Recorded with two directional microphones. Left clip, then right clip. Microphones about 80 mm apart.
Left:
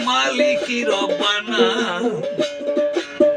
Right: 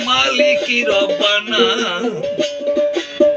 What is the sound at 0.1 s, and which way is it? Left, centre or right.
Music, left.